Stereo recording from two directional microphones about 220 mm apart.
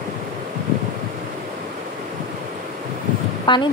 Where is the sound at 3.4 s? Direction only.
20° left (ahead or behind).